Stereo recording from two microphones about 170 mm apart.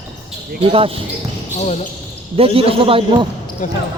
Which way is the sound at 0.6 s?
35° right (ahead or behind).